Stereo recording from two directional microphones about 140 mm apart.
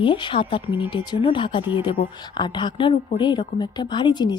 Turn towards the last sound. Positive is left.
turn(degrees=30)  # may be behind; listen again after turning